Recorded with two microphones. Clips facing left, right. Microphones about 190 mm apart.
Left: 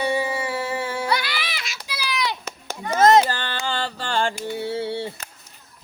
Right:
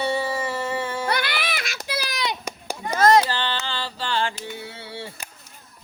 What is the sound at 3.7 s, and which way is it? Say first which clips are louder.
Mantra: left 2 dB; 50° left (ahead or behind).